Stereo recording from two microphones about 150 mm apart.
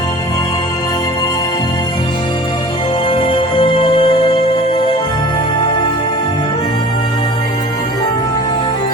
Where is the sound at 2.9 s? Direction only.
35° left (ahead or behind).